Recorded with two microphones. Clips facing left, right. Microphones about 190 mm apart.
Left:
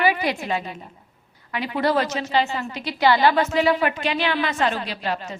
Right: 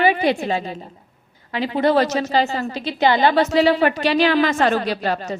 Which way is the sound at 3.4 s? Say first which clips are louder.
Right 4 dB; 35° right (ahead or behind).